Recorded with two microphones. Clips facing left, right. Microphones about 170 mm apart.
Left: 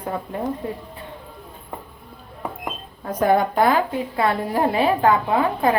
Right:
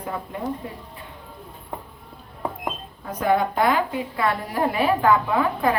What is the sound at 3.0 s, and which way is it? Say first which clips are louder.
A woman's voice: left 3 dB; 40° left (ahead or behind).